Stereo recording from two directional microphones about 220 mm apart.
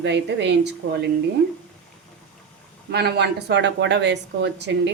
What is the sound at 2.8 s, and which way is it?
Speech, 50° right (ahead or behind).